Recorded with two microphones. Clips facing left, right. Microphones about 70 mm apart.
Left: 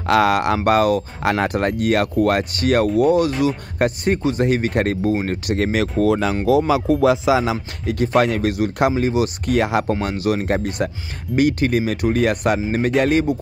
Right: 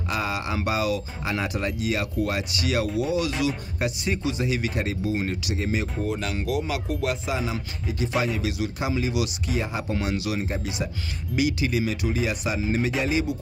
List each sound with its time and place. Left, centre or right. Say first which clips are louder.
0.0 s speech: left 12 dB; left
0.7 s speech: left 9 dB; left
7.2 s music: left 11 dB; left
7.8 s speech: left 9 dB; left
8.9 s speech: left 7 dB; left
9.5 s speech: left 10 dB; left
9.9 s speech: left 6 dB; left